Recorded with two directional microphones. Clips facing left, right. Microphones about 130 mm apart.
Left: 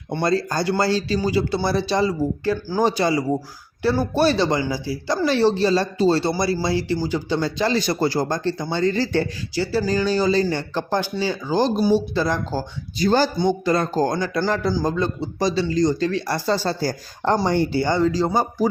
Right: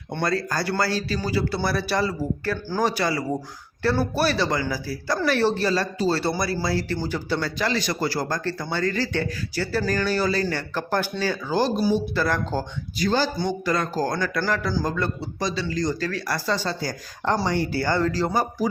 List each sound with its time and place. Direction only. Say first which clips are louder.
0.1 s speech: left 4 dB; 25° left (ahead or behind)
9.6 s speech: left 4 dB; 15° left (ahead or behind)
15.4 s speech: left 7 dB; 30° left (ahead or behind)